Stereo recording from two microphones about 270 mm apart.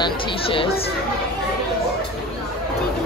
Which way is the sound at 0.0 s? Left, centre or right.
Centre.